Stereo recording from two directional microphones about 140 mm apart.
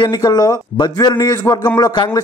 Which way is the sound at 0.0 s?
30° left (ahead or behind).